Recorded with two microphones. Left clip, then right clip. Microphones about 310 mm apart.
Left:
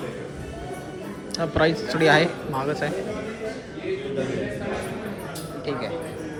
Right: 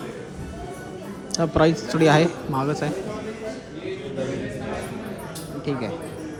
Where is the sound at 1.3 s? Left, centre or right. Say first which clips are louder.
Right 2 dB; centre.